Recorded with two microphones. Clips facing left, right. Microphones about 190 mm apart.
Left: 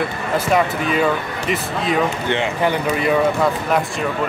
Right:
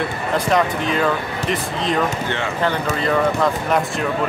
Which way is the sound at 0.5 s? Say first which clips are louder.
Left 1 dB; 5° left (ahead or behind).